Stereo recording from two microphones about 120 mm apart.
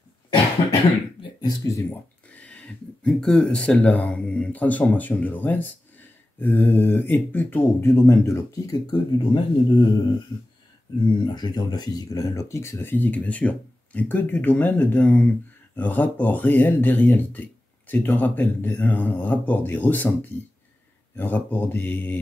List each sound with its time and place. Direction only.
1.4 s speech: 25° left (ahead or behind)
2.3 s speech: 10° left (ahead or behind); by 9.8 s 35° left (ahead or behind)
11.2 s speech: 35° left (ahead or behind); by 22.2 s 15° left (ahead or behind)